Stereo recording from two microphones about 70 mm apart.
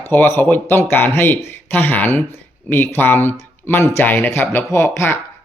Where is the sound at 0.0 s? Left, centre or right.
Left.